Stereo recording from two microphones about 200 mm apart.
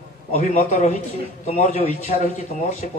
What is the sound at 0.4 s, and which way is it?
Speech, 35° left (ahead or behind).